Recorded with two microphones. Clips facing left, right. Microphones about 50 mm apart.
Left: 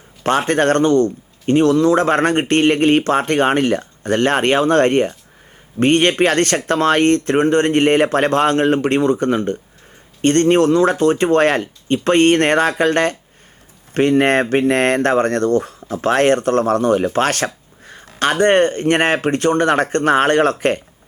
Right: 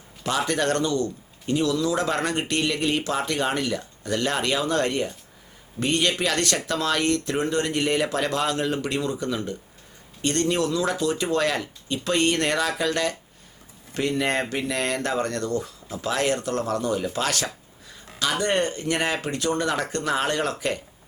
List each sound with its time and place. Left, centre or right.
0.2 s speech: left